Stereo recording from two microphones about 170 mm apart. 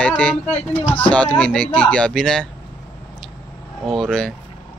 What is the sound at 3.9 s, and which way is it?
Speech, centre (ahead or behind).